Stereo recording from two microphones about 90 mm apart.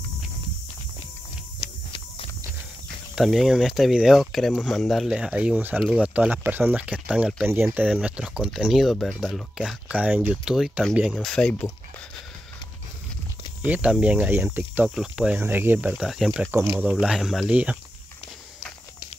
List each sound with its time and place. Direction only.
1.6 s a sound: 80° left
3.2 s speech: centre (ahead or behind)
7.4 s speech: 25° right (ahead or behind)
7.9 s speech: 10° right (ahead or behind)
9.8 s speech: 15° right (ahead or behind)
10.3 s speech: 5° right (ahead or behind)
13.7 s speech: 10° right (ahead or behind)
15.0 s speech: 5° right (ahead or behind)
15.3 s speech: 25° right (ahead or behind)
15.9 s speech: 5° right (ahead or behind)
16.5 s speech: 30° right (ahead or behind)
17.0 s speech: 5° right (ahead or behind)
17.5 s speech: 15° right (ahead or behind)